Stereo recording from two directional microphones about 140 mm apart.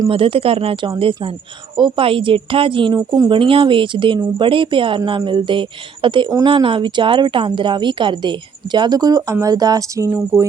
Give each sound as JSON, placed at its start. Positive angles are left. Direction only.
{"t": 0.1, "sound": "speech", "side_deg": -40}
{"t": 3.3, "sound": "speech", "side_deg": -40}